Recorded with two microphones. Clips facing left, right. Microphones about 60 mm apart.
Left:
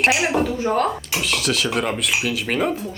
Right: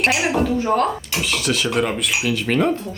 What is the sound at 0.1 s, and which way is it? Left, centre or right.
A man's voice, centre.